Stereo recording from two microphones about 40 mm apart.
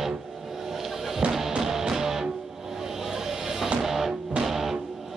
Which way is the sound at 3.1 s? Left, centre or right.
Centre.